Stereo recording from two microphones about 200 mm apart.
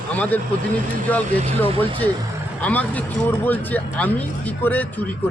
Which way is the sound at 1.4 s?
30° right (ahead or behind).